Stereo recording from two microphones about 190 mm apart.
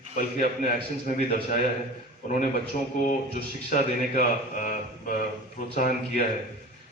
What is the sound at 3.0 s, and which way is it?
Speech, 45° left (ahead or behind).